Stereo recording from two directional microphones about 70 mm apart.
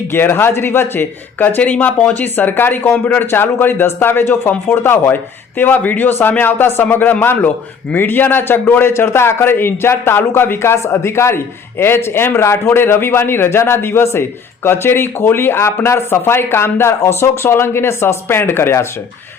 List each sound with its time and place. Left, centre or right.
0.1 s a man's voice: left